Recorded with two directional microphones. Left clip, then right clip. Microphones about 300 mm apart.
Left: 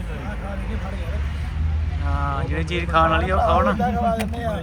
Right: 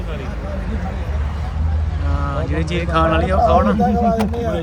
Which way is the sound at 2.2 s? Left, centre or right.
Centre.